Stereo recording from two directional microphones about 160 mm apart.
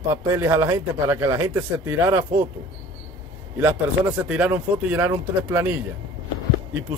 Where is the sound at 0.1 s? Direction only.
15° right (ahead or behind).